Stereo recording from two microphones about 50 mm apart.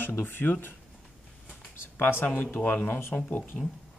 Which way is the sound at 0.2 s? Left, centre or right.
Left.